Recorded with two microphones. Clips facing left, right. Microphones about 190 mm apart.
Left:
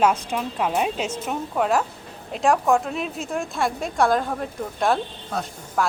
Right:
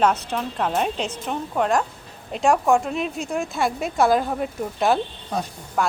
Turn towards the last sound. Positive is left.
turn(degrees=-5)  # may be behind; listen again after turning